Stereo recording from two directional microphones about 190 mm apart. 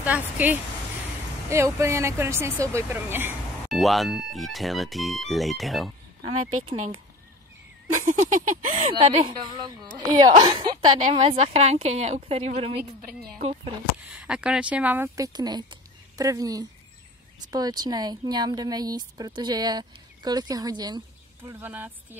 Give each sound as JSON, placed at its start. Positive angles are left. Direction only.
{"t": 0.0, "sound": "speech", "side_deg": -10}
{"t": 3.6, "sound": "speech", "side_deg": 0}
{"t": 8.0, "sound": "a sound", "side_deg": -40}
{"t": 9.2, "sound": "a woman's voice", "side_deg": -25}
{"t": 14.1, "sound": "a woman's voice", "side_deg": -5}
{"t": 21.5, "sound": "speech", "side_deg": -10}